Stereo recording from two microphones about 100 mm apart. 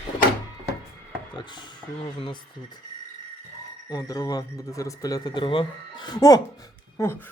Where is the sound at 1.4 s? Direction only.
50° left (ahead or behind).